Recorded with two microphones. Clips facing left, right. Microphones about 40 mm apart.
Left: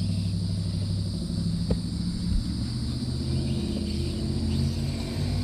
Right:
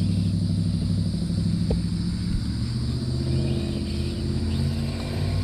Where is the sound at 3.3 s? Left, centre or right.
Centre.